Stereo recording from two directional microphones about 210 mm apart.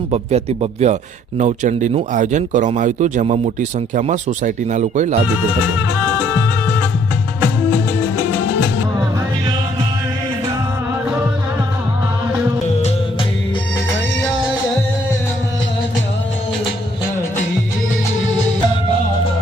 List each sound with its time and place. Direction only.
0.1 s speech: 30° right (ahead or behind)